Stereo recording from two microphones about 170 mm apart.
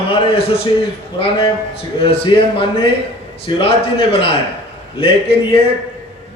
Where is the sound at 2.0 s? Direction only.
35° left (ahead or behind).